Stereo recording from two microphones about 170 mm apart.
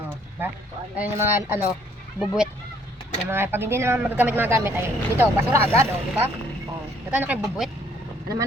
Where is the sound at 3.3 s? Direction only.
15° right (ahead or behind).